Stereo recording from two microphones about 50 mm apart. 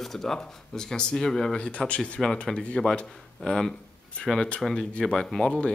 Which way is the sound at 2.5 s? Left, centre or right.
Centre.